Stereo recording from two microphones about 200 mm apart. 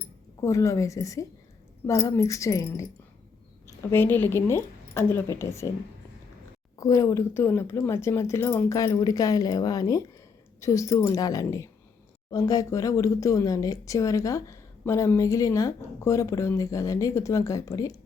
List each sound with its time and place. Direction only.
0.4 s speech: 15° left (ahead or behind)
3.9 s speech: 10° left (ahead or behind)
6.7 s speech: 15° left (ahead or behind)